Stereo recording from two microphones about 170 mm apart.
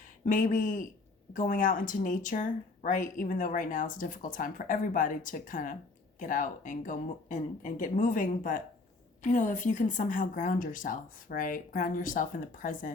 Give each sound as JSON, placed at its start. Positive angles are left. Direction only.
{"t": 0.3, "sound": "a woman's voice", "side_deg": 55}